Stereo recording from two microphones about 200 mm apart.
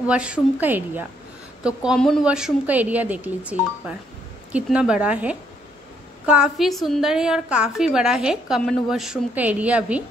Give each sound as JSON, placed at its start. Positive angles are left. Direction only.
{"t": 0.0, "sound": "a woman's voice", "side_deg": -5}